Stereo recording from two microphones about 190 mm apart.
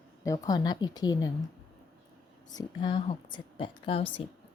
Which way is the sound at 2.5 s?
25° left (ahead or behind).